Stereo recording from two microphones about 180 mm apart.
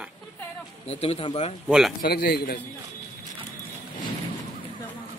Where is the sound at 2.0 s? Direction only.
60° left (ahead or behind).